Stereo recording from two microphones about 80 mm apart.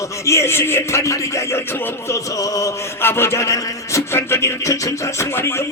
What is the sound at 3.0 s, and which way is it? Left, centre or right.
A man's voice, left.